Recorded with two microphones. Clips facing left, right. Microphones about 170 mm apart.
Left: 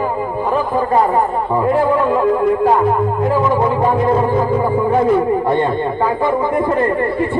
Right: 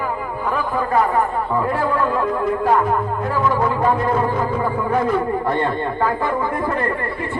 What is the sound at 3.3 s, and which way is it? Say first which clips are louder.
A man's voice: left 3 dB; 20° left (ahead or behind).